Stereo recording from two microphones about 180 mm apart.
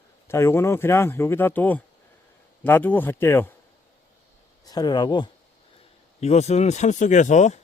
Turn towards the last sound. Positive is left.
turn(degrees=40)  # may be behind; listen again after turning